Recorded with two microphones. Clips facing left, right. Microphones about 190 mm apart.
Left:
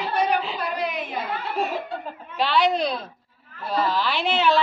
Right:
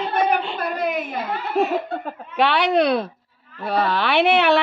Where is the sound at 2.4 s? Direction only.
65° right (ahead or behind).